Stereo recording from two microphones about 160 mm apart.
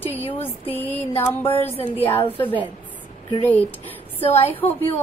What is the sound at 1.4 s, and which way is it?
Speech, 35° left (ahead or behind).